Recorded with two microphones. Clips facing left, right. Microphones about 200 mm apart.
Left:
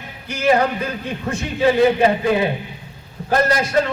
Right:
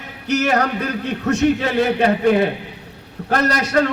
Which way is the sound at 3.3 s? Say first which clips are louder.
Left 1 dB; 70° right (ahead or behind).